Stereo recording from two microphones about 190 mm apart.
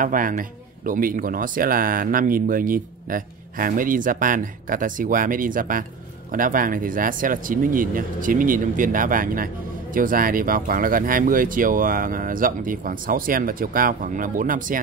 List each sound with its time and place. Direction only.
0.0 s speech: 45° right (ahead or behind)